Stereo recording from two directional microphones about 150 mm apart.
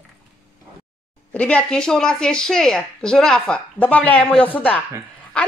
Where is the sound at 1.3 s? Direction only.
10° left (ahead or behind).